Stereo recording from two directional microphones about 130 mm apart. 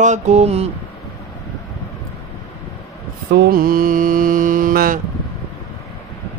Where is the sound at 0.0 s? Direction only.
65° right (ahead or behind).